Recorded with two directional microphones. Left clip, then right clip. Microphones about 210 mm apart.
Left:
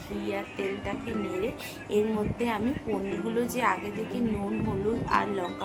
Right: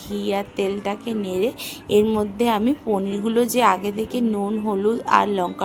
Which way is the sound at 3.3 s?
50° right (ahead or behind).